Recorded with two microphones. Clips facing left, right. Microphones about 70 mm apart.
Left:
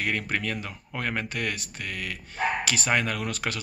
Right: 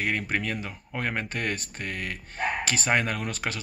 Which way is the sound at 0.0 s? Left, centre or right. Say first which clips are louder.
Even; centre.